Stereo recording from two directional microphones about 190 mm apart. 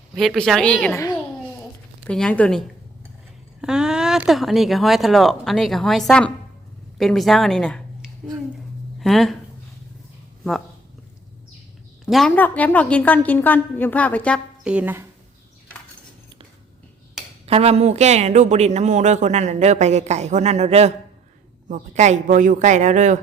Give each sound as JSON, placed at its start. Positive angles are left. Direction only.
{"t": 0.1, "sound": "speech", "side_deg": 0}
{"t": 2.0, "sound": "speech", "side_deg": 5}
{"t": 12.0, "sound": "a woman's voice", "side_deg": 0}
{"t": 14.6, "sound": "speech", "side_deg": -5}
{"t": 17.4, "sound": "speech", "side_deg": -30}